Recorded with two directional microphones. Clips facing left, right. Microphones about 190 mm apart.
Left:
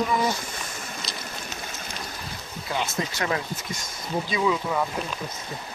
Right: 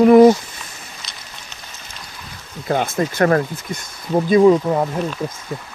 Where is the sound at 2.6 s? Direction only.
50° right (ahead or behind).